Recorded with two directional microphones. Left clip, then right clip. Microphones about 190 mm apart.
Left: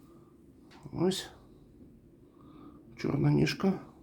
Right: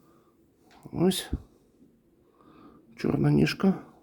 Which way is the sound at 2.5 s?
30° right (ahead or behind).